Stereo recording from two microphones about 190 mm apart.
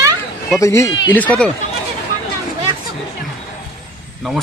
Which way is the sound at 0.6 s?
15° left (ahead or behind).